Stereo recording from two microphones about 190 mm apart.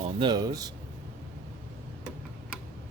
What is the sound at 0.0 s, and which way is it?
Speech, 25° right (ahead or behind).